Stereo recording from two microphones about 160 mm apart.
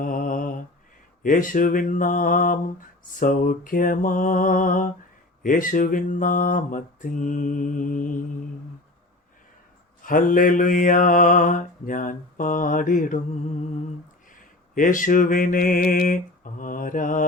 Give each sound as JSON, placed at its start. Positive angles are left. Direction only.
{"t": 0.0, "sound": "mantra", "side_deg": 60}
{"t": 10.0, "sound": "mantra", "side_deg": 55}
{"t": 14.8, "sound": "mantra", "side_deg": 55}